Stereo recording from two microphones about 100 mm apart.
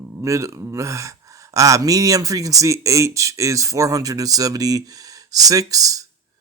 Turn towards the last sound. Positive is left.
turn(degrees=-35)  # may be behind; listen again after turning